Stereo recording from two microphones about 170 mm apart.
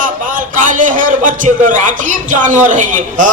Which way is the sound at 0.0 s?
50° right (ahead or behind).